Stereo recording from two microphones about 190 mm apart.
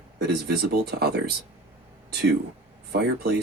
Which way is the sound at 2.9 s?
60° right (ahead or behind).